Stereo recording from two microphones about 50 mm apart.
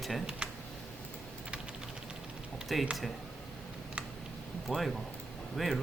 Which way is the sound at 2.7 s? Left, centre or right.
Centre.